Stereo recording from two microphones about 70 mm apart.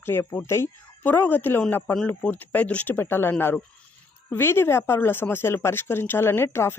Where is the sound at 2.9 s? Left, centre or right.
Left.